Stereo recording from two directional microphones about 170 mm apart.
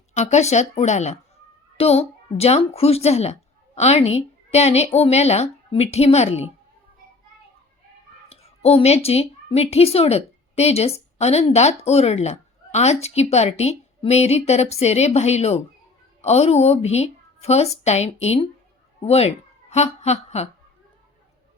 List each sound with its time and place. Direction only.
0.1 s a woman's voice: 45° left (ahead or behind)
8.3 s a woman's voice: 35° left (ahead or behind)